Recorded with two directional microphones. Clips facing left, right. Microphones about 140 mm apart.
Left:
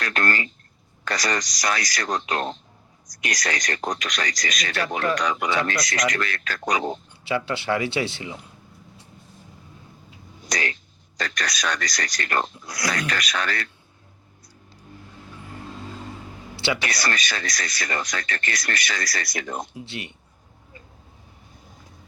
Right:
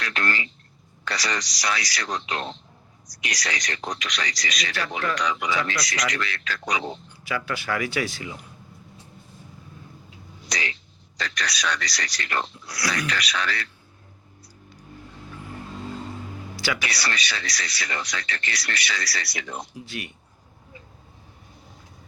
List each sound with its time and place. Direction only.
0.0 s speech: 45° left (ahead or behind)
7.3 s speech: 25° left (ahead or behind)
10.4 s a sound: 50° left (ahead or behind)
11.2 s speech: 45° left (ahead or behind)
16.6 s a sound: 25° left (ahead or behind)
16.8 s speech: 45° left (ahead or behind)
19.7 s speech: 25° left (ahead or behind)